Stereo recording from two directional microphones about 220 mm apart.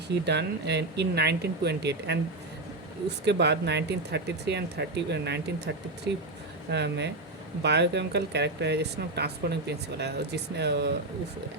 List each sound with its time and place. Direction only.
0.1 s speech: 50° right (ahead or behind)
6.7 s speech: 50° right (ahead or behind)